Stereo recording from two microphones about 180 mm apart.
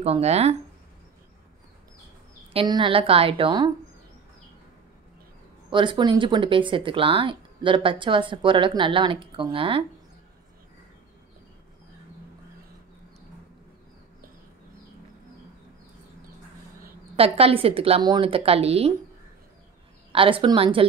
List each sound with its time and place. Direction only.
0.0 s a woman's voice: 35° right (ahead or behind)
2.5 s speech: 25° right (ahead or behind)
5.7 s speech: 25° right (ahead or behind)
17.2 s a woman's voice: 30° right (ahead or behind)
20.1 s speech: 30° right (ahead or behind)